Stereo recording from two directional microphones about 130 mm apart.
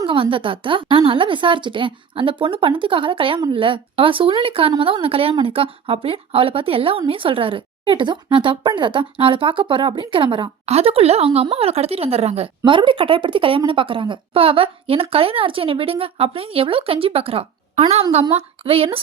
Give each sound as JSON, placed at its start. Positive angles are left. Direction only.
{"t": 0.0, "sound": "a woman's voice", "side_deg": -40}
{"t": 10.7, "sound": "a woman's voice", "side_deg": -50}